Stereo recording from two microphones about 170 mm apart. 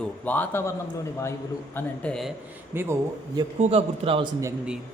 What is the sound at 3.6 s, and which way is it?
Speech, 35° right (ahead or behind).